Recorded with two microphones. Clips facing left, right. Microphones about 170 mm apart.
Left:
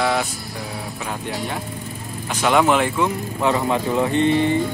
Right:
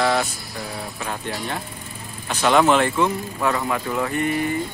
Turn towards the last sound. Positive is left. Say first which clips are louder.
# left 5 dB
turn(degrees=25)  # may be behind; listen again after turning